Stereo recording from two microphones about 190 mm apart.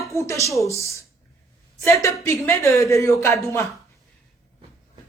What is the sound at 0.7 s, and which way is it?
Speech, 15° left (ahead or behind).